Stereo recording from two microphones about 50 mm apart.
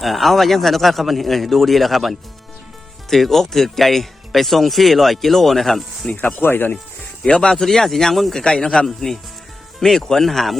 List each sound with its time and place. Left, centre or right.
0.0 s speech: centre
6.2 s speech: left
7.3 s a man's voice: centre